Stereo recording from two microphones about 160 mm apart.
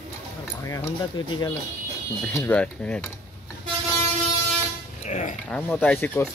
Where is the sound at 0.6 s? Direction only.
20° left (ahead or behind).